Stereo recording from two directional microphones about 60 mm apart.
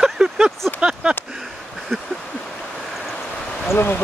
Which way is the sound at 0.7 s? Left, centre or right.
Centre.